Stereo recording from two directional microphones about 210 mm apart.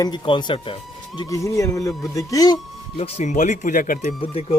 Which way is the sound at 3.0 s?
30° left (ahead or behind).